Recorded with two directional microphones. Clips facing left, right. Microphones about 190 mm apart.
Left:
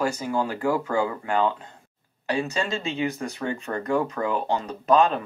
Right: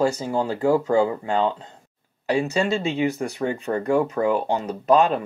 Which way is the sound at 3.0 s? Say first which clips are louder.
Right 4 dB; 25° right (ahead or behind).